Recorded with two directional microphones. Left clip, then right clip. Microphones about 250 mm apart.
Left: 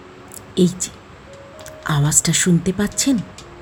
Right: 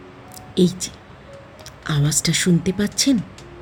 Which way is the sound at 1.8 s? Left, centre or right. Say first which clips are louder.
Left 3 dB; centre.